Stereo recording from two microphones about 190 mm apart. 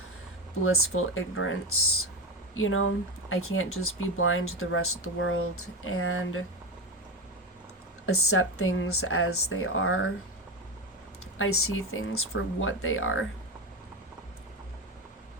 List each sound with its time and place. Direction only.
0.6 s speech: 90° left
2.6 s speech: 90° left
8.0 s speech: 90° left
11.3 s speech: 90° left